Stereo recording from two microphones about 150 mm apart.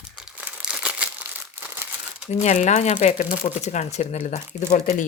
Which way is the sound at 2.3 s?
50° left (ahead or behind).